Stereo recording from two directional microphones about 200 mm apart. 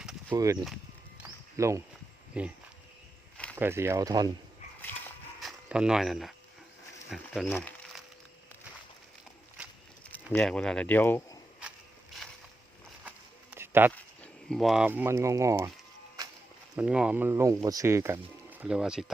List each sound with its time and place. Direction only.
0.3 s speech: 15° right (ahead or behind)
1.2 s a sound: 15° right (ahead or behind)
2.3 s speech: 5° right (ahead or behind)
3.5 s speech: 10° right (ahead or behind)
5.4 s speech: centre (ahead or behind)
10.3 s speech: 5° left (ahead or behind)
13.1 s a sound: 10° right (ahead or behind)
13.9 s speech: 5° left (ahead or behind); by 15.7 s 15° right (ahead or behind)
16.7 s speech: 5° right (ahead or behind)